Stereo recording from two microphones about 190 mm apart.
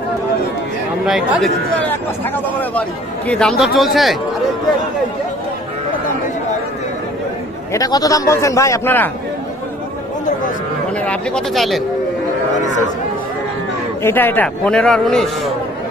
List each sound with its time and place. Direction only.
1.0 s speech: centre (ahead or behind)
7.7 s speech: 20° left (ahead or behind)
11.0 s speech: 5° left (ahead or behind)
14.0 s speech: 10° left (ahead or behind)